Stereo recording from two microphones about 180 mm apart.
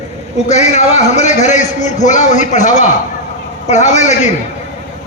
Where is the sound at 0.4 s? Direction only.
40° left (ahead or behind).